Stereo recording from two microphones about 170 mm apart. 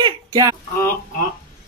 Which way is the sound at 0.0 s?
25° right (ahead or behind).